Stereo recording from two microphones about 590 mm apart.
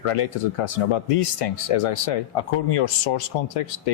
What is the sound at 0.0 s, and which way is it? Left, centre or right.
Speech, left.